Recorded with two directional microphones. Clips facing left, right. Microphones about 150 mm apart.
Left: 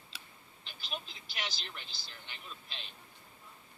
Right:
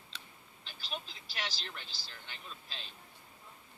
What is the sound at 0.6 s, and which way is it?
Speech, 35° right (ahead or behind).